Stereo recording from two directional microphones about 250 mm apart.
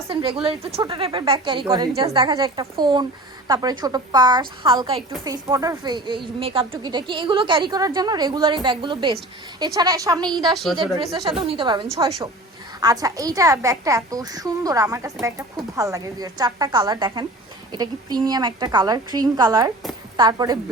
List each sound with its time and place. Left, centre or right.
0.1 s a woman's voice: centre
10.5 s a woman's voice: centre
10.8 s a woman's voice: centre